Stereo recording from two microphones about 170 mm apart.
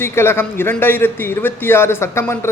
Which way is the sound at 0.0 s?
15° left (ahead or behind).